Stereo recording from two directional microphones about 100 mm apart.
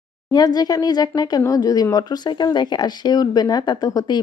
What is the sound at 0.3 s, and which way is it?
Speech, 40° left (ahead or behind).